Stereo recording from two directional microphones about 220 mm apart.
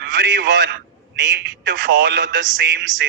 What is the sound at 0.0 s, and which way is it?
A man's voice, 45° right (ahead or behind).